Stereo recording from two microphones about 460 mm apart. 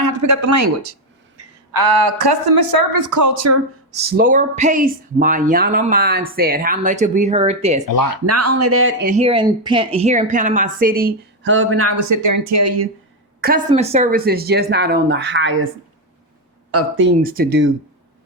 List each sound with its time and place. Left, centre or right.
0.0 s speech: right
1.7 s a woman's voice: right
4.1 s speech: centre
8.3 s speech: right
13.7 s speech: centre
16.7 s speech: right